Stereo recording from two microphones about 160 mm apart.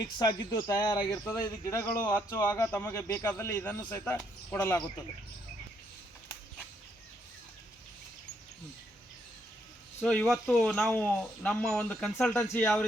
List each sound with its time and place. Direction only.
0.0 s speech: 25° left (ahead or behind)
1.1 s a man's voice: 15° left (ahead or behind)
10.0 s a man's voice: 5° left (ahead or behind)